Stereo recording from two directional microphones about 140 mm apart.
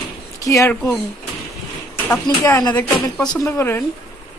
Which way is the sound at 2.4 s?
15° left (ahead or behind).